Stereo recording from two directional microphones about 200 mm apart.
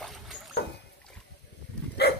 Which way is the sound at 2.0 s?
55° left (ahead or behind).